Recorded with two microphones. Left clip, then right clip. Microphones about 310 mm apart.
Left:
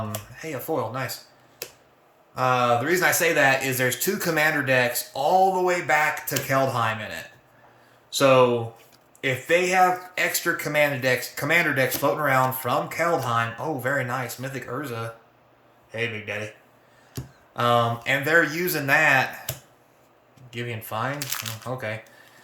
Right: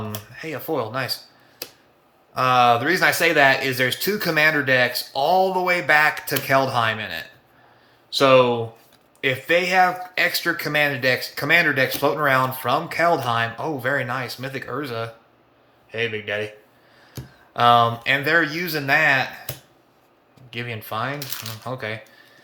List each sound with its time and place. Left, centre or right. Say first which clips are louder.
0.3 s speech: right 2 dB; centre
2.3 s speech: right 5 dB; centre
20.5 s speech: right 3 dB; centre